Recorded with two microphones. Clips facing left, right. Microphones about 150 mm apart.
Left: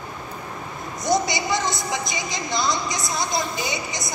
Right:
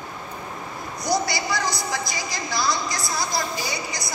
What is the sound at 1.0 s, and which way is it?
A woman's voice, 20° left (ahead or behind).